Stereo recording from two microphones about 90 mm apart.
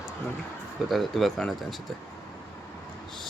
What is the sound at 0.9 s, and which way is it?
Speech, centre (ahead or behind).